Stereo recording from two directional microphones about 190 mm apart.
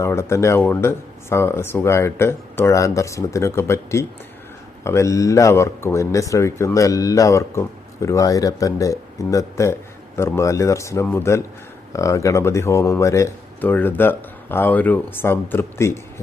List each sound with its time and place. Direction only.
0.0 s speech: 15° left (ahead or behind)